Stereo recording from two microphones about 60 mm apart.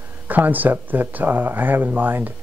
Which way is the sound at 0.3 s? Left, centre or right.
Right.